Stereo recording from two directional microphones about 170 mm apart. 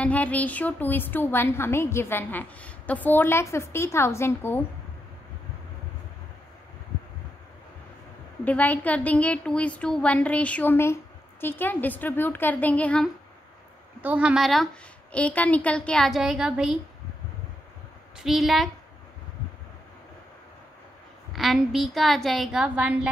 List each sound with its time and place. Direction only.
0.0 s a woman's voice: 10° left (ahead or behind)
8.5 s a woman's voice: 10° left (ahead or behind)
14.0 s a woman's voice: 5° right (ahead or behind)
18.1 s a woman's voice: centre (ahead or behind)
21.3 s a woman's voice: centre (ahead or behind)